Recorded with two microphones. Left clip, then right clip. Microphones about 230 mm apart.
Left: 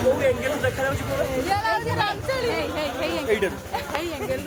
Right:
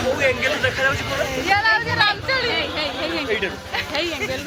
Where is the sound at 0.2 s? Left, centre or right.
Centre.